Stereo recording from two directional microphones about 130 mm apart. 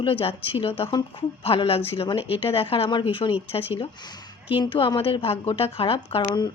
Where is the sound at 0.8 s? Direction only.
35° left (ahead or behind).